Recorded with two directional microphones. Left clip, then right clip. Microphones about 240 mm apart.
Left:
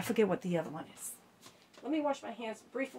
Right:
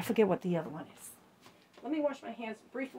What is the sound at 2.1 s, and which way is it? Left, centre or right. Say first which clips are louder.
Speech: left 3 dB; centre.